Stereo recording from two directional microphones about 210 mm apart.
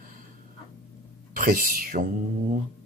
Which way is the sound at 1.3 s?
40° right (ahead or behind).